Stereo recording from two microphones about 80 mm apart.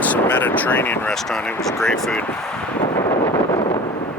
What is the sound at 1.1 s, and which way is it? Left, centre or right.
Speech, centre.